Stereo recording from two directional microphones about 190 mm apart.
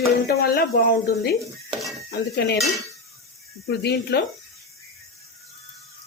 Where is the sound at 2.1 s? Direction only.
60° left (ahead or behind).